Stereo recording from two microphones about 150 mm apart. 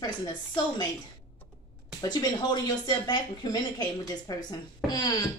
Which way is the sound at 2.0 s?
25° left (ahead or behind).